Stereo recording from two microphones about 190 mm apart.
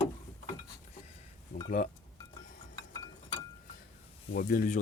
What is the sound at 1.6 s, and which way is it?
Speech, 45° left (ahead or behind).